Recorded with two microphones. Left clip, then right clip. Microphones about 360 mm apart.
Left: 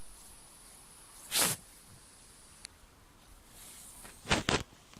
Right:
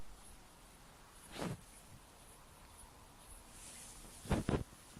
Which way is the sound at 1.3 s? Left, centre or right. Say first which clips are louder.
Left 14 dB; left.